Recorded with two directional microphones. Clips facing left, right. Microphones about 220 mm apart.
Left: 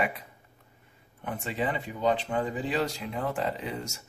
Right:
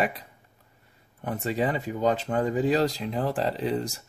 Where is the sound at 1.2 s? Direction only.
40° right (ahead or behind).